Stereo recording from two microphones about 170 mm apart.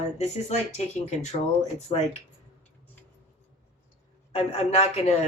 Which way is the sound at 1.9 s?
30° left (ahead or behind).